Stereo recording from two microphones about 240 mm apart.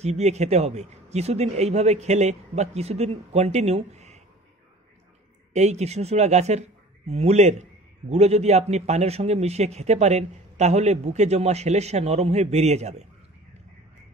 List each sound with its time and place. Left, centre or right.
0.0 s a man's voice: right
5.5 s a man's voice: right